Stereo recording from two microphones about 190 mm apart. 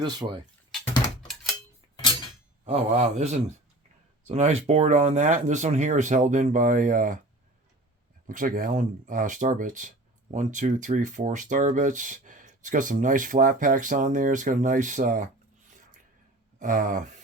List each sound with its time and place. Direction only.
0.0 s speech: 25° right (ahead or behind)
2.6 s speech: 35° right (ahead or behind)
8.3 s speech: 45° right (ahead or behind)
16.6 s a sound: 45° right (ahead or behind)